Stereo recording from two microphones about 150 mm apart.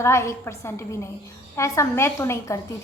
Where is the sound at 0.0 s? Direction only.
20° left (ahead or behind).